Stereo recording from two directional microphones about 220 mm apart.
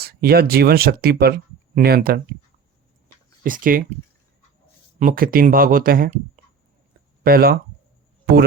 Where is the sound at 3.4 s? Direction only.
40° right (ahead or behind).